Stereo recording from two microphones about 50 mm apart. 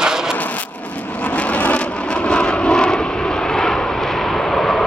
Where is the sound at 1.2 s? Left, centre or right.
Left.